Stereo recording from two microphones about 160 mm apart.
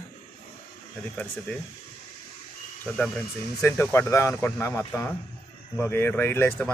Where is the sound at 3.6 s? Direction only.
15° left (ahead or behind).